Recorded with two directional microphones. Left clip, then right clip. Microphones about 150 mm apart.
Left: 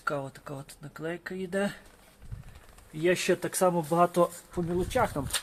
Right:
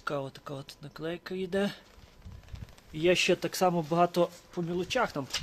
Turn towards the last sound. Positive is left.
turn(degrees=-20)  # may be behind; listen again after turning